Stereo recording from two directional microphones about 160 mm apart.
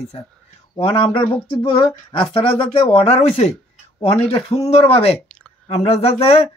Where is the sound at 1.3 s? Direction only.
30° left (ahead or behind).